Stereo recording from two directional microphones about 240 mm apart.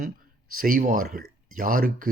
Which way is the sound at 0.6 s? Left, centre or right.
Right.